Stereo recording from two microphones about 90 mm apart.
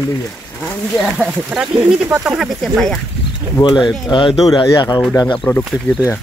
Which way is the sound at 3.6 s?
60° left (ahead or behind).